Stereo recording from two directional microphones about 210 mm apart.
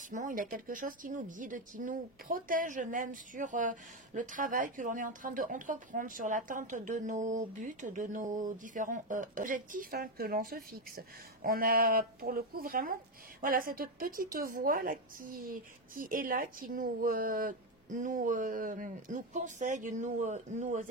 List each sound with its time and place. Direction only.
0.1 s speech: 40° right (ahead or behind)